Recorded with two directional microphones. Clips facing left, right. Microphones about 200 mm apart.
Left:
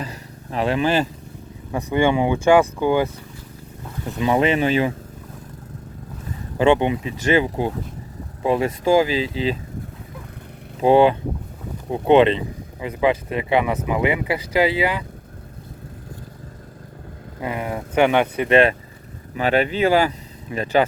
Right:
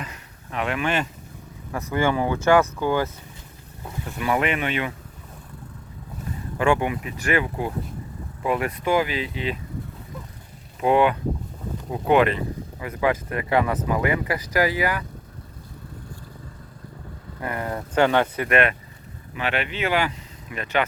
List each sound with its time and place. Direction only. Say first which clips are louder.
0.0 s a sound: left 6 dB; 35° left (ahead or behind)
1.7 s speech: left 4 dB; 15° left (ahead or behind)
4.2 s speech: left 5 dB; 25° left (ahead or behind)
6.6 s speech: left 5 dB; 25° left (ahead or behind)
10.8 s speech: left 5 dB; 30° left (ahead or behind)
17.4 s speech: left 3 dB; 15° left (ahead or behind); by 20.8 s 35° left (ahead or behind)